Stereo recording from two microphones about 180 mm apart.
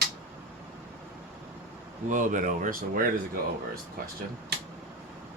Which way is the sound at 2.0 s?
45° right (ahead or behind).